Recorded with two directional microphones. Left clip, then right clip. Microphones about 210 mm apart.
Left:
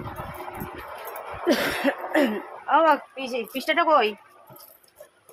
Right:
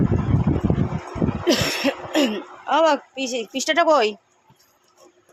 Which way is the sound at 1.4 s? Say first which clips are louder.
Right 1 dB; 20° right (ahead or behind).